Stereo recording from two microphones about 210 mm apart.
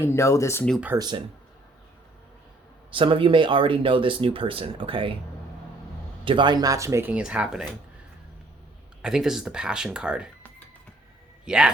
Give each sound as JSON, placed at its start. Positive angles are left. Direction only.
{"t": 0.0, "sound": "speech", "side_deg": 15}
{"t": 0.8, "sound": "speech", "side_deg": -10}
{"t": 2.9, "sound": "speech", "side_deg": -25}
{"t": 6.2, "sound": "speech", "side_deg": -20}
{"t": 9.0, "sound": "speech", "side_deg": -5}
{"t": 11.4, "sound": "speech", "side_deg": -5}